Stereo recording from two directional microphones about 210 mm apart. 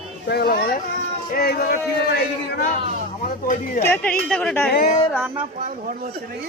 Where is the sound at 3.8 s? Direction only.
10° left (ahead or behind).